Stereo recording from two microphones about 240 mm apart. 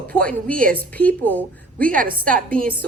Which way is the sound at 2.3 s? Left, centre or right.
Centre.